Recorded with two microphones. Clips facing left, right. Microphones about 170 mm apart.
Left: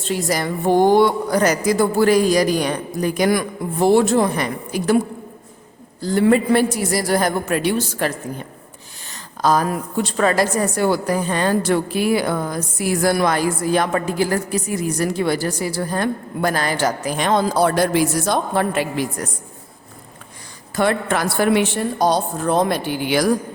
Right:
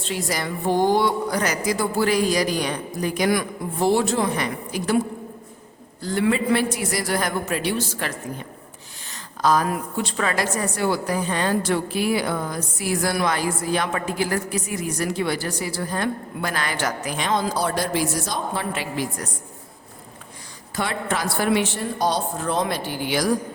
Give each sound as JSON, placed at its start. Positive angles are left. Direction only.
{"t": 0.0, "sound": "a woman's voice", "side_deg": 45}
{"t": 6.0, "sound": "a man's voice", "side_deg": 35}
{"t": 7.5, "sound": "a woman's voice", "side_deg": 50}
{"t": 9.4, "sound": "a woman's voice", "side_deg": 35}
{"t": 17.2, "sound": "a woman's voice", "side_deg": 50}
{"t": 20.7, "sound": "a woman's voice", "side_deg": 55}